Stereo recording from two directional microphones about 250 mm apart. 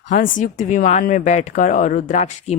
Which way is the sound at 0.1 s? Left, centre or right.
Left.